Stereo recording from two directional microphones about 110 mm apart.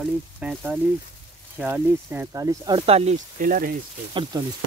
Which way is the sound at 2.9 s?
70° right (ahead or behind).